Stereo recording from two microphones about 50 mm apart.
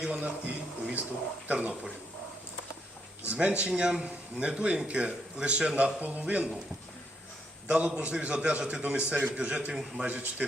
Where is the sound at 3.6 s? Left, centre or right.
Right.